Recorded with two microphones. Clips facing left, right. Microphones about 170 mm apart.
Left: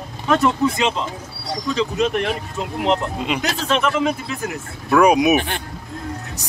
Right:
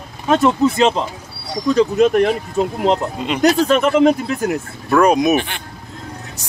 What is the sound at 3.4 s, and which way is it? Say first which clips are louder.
Speech: right 10 dB; 40° right (ahead or behind).